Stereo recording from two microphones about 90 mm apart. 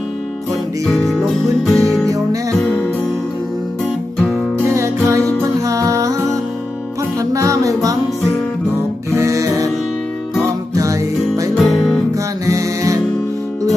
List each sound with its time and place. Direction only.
0.9 s music: 5° left (ahead or behind)
2.0 s music: 35° right (ahead or behind)
4.7 s music: 35° right (ahead or behind)
9.1 s music: 35° right (ahead or behind)
11.5 s music: centre (ahead or behind)
12.5 s music: 35° right (ahead or behind)